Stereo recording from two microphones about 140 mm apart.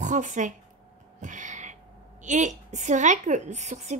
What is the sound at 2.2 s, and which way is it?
Speech, 60° right (ahead or behind).